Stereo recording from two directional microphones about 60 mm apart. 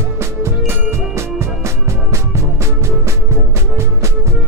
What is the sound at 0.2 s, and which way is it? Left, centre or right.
Music, right.